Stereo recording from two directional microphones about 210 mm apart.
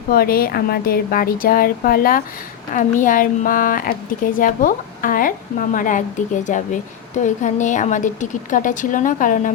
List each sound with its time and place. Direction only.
0.1 s a woman's voice: 45° left (ahead or behind)